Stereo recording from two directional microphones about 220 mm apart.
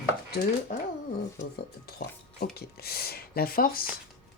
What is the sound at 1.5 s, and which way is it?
Speech, 45° left (ahead or behind).